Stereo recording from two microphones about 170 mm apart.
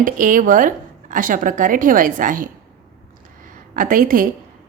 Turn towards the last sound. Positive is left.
turn(degrees=-55)  # may be behind; listen again after turning